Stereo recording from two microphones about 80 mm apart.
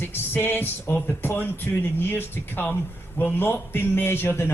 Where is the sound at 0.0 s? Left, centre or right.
Left.